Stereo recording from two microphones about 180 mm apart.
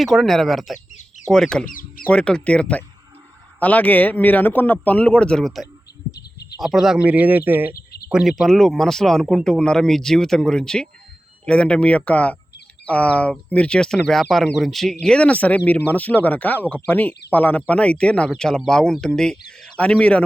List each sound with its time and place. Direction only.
0.0 s speech: centre (ahead or behind)
0.9 s chicken: 40° left (ahead or behind)
1.3 s speech: 5° left (ahead or behind)
1.6 s speech: 50° left (ahead or behind)
2.0 s speech: 5° left (ahead or behind)